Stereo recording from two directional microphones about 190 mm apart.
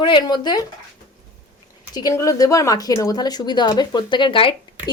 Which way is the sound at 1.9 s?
20° left (ahead or behind).